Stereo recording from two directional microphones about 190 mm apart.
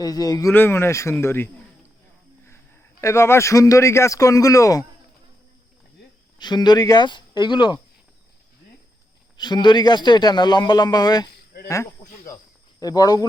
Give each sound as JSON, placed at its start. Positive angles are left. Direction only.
{"t": 0.0, "sound": "speech", "side_deg": 20}
{"t": 3.0, "sound": "speech", "side_deg": 15}
{"t": 6.4, "sound": "a man's voice", "side_deg": 20}
{"t": 9.4, "sound": "a man's voice", "side_deg": 25}
{"t": 12.8, "sound": "a man's voice", "side_deg": 20}